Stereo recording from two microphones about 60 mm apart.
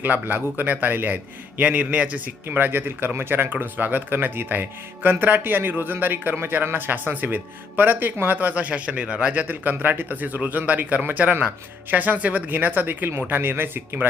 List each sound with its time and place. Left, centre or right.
0.0 s a man's voice: right